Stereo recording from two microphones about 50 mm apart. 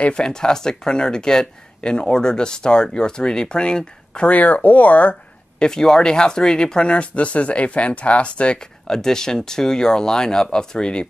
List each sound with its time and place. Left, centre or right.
0.0 s speech: centre
4.3 s speech: left
5.6 s speech: centre
8.9 s speech: centre